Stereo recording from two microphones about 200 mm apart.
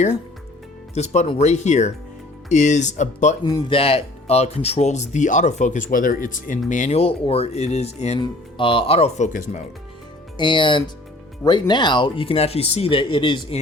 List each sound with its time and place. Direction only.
0.9 s speech: 35° left (ahead or behind)
3.4 s speech: 20° left (ahead or behind); by 9.6 s 35° left (ahead or behind)
10.3 s speech: 25° left (ahead or behind)